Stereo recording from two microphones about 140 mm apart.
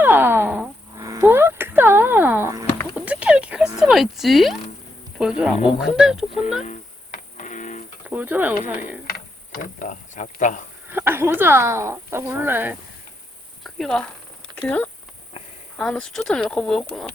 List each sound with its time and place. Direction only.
0.0 s wail: 15° right (ahead or behind)
0.9 s a sound: 20° right (ahead or behind); by 4.6 s centre (ahead or behind)
5.1 s speech: 5° right (ahead or behind)
6.7 s music: 65° left (ahead or behind)
8.0 s speech: 10° right (ahead or behind)
9.0 s speech: 90° left; by 10.6 s 65° left (ahead or behind)
10.9 s speech: 15° right (ahead or behind)
13.7 s a woman's voice: centre (ahead or behind)